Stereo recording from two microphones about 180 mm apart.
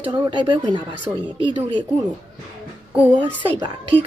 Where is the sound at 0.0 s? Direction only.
25° right (ahead or behind).